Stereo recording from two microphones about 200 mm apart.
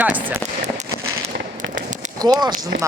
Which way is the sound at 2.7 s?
65° right (ahead or behind).